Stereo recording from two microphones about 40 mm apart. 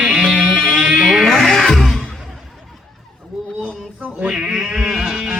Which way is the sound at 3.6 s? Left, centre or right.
Right.